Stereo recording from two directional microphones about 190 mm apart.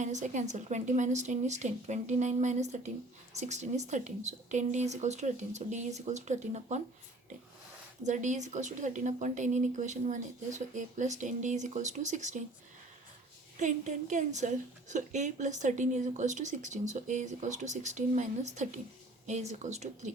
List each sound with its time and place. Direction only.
0.0 s a woman's voice: 40° right (ahead or behind)
8.0 s a woman's voice: 40° right (ahead or behind)
13.6 s a woman's voice: 40° right (ahead or behind)